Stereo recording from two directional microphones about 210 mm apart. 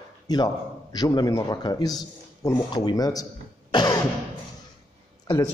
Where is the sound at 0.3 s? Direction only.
20° left (ahead or behind).